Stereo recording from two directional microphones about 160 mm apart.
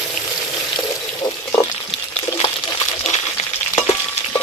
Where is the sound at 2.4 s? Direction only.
40° left (ahead or behind).